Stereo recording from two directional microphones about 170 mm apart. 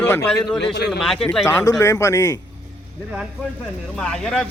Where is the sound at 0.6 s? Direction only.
75° left (ahead or behind).